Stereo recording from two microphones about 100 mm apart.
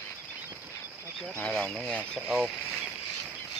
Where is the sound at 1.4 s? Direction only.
10° left (ahead or behind).